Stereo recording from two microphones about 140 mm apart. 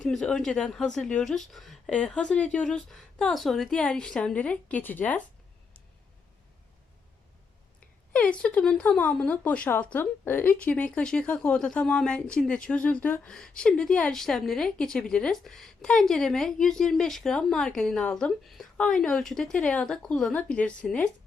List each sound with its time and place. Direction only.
0.0 s speech: 5° left (ahead or behind)
8.1 s speech: 10° left (ahead or behind)